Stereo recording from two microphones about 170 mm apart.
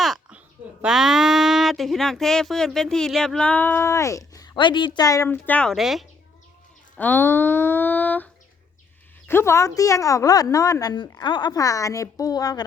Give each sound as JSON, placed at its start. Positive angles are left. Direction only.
{"t": 0.0, "sound": "speech", "side_deg": -5}
{"t": 6.9, "sound": "a woman's voice", "side_deg": 10}